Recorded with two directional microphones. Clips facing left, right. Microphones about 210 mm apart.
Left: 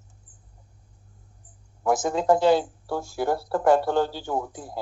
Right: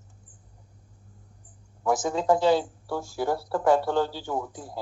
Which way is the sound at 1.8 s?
55° left (ahead or behind).